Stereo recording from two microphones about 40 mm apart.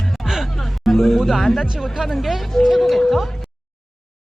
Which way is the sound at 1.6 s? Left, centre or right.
Centre.